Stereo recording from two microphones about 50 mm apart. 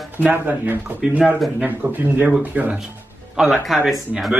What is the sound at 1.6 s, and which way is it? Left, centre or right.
Speech, right.